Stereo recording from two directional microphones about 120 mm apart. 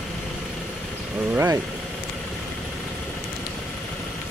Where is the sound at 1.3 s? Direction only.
20° right (ahead or behind).